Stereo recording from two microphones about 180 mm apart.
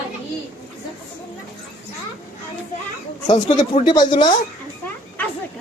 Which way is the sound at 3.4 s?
45° left (ahead or behind).